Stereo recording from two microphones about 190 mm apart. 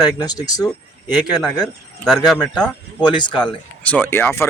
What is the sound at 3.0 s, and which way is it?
Speech, 25° left (ahead or behind).